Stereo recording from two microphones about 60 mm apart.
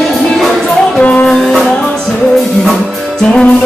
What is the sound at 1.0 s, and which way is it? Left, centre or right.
Music, left.